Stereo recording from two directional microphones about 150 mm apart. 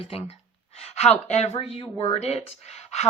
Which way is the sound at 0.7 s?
45° left (ahead or behind).